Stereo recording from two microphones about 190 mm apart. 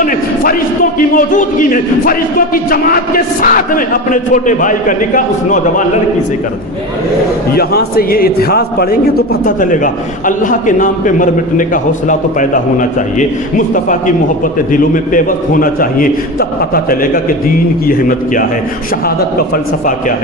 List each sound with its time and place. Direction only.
0.0 s a sound: 45° left (ahead or behind)
0.9 s a man's voice: 45° left (ahead or behind)
7.5 s a man's voice: 55° left (ahead or behind)
14.4 s a man's voice: 45° left (ahead or behind)